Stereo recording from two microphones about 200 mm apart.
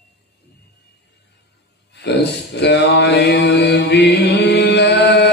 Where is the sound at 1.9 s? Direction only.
55° left (ahead or behind).